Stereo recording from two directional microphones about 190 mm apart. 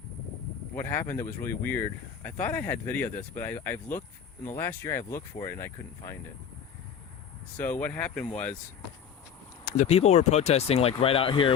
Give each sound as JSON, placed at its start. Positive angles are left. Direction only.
{"t": 0.8, "sound": "speech", "side_deg": 10}
{"t": 7.8, "sound": "speech", "side_deg": 5}
{"t": 9.6, "sound": "speech", "side_deg": 40}